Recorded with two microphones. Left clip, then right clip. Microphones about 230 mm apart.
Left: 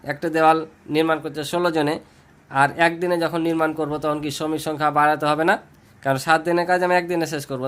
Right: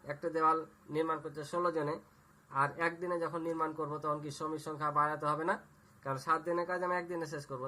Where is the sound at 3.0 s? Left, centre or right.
Left.